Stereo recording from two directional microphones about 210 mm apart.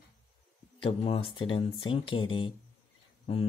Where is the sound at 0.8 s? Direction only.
25° left (ahead or behind).